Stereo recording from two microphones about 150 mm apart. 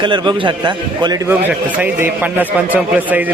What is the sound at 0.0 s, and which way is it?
A man's voice, 30° right (ahead or behind).